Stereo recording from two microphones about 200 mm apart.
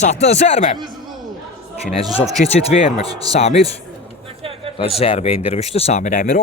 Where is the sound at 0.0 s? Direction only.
35° left (ahead or behind).